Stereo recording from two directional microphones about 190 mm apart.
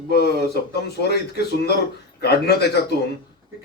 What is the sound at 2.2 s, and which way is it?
Speech, 60° left (ahead or behind).